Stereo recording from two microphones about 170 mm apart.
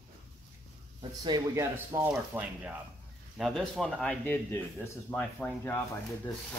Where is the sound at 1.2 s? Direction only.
20° right (ahead or behind); by 5.8 s 10° left (ahead or behind).